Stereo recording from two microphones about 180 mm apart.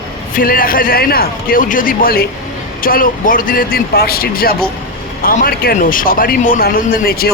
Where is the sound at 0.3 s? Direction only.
50° left (ahead or behind).